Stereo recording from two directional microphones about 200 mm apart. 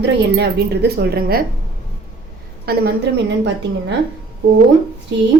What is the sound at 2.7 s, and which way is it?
Speech, 50° right (ahead or behind).